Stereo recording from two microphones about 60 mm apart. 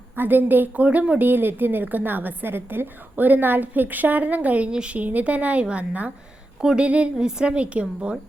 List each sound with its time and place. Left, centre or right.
0.2 s a woman's voice: right
1.3 s a woman's voice: right